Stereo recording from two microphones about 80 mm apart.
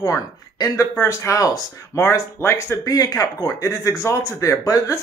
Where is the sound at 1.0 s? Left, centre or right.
Left.